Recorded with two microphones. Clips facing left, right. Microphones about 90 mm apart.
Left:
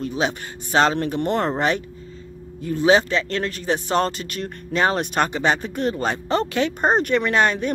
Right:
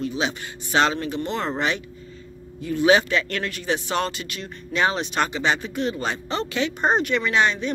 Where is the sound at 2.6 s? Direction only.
35° left (ahead or behind).